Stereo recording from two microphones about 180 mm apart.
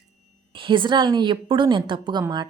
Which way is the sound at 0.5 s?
25° right (ahead or behind).